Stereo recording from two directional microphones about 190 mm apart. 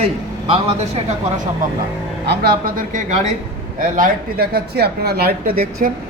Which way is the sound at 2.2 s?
55° right (ahead or behind).